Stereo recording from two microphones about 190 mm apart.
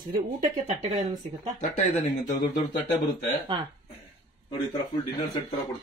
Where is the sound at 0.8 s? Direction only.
35° right (ahead or behind).